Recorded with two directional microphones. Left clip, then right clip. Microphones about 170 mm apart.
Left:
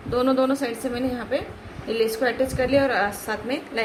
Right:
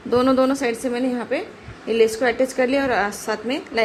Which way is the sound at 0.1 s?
50° right (ahead or behind).